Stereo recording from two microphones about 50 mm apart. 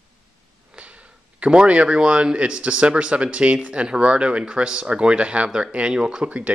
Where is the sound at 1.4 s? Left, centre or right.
Right.